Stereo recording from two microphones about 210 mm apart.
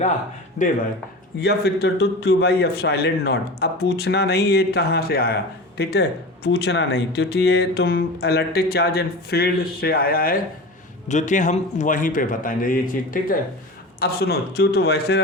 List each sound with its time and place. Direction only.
1.4 s a man's voice: 50° left (ahead or behind)